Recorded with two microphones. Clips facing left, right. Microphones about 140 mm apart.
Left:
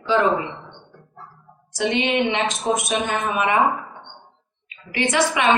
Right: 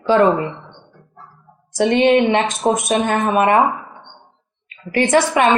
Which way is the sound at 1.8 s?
50° right (ahead or behind).